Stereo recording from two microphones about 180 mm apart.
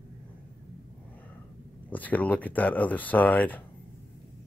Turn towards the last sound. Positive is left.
turn(degrees=10)  # may be behind; listen again after turning